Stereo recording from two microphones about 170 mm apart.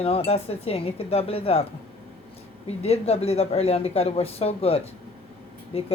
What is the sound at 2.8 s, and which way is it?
A woman's voice, 40° left (ahead or behind).